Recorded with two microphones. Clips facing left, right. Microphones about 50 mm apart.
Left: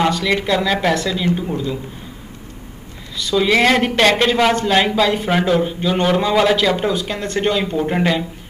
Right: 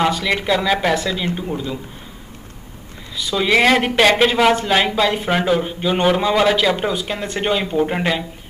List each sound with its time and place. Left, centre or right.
0.0 s speech: centre
3.2 s speech: centre